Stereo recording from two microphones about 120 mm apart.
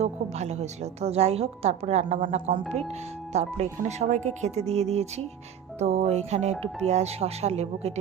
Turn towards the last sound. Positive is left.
turn(degrees=-60)  # may be behind; listen again after turning